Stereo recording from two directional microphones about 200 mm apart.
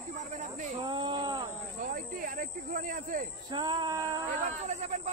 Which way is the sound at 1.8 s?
45° right (ahead or behind).